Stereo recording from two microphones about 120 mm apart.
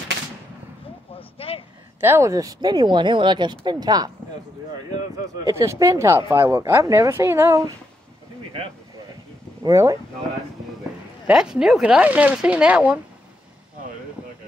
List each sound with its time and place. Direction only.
1.4 s a sound: 50° left (ahead or behind)
2.0 s speech: 20° right (ahead or behind)
9.6 s speech: 30° right (ahead or behind)
11.2 s speech: 5° right (ahead or behind)